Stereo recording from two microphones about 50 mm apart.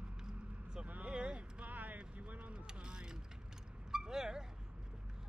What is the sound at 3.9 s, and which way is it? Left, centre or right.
Dog, centre.